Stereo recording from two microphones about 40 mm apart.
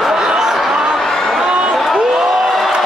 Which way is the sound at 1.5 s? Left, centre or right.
Centre.